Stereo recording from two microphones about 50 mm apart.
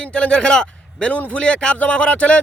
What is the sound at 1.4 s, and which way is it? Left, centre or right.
Speech, centre.